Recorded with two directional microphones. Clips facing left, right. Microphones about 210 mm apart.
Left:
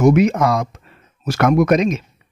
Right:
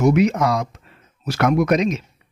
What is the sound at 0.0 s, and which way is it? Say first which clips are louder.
Speech: left 3 dB; 50° left (ahead or behind).